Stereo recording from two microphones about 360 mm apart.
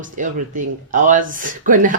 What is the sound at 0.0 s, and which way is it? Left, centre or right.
Speech, right.